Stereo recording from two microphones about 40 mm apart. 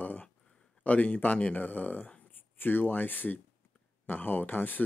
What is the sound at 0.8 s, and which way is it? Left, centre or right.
Speech, left.